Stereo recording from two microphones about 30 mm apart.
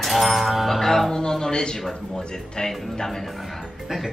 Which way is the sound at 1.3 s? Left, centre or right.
Left.